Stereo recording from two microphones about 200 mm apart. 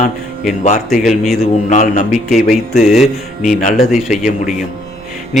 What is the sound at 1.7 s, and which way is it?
Speech, 40° left (ahead or behind).